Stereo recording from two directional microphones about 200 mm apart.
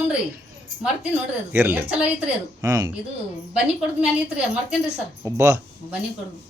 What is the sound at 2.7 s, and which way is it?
Speech, 20° right (ahead or behind).